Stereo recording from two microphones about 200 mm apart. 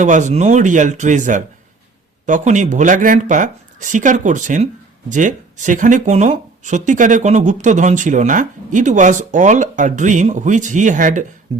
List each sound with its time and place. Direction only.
0.0 s speech: 40° right (ahead or behind)